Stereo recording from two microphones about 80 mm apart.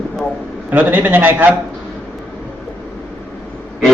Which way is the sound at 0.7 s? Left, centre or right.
Right.